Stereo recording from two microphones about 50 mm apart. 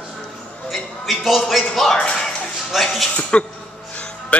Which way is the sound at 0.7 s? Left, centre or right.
Centre.